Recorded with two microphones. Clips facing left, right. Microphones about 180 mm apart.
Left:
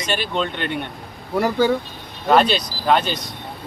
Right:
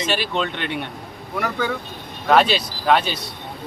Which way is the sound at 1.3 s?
30° left (ahead or behind).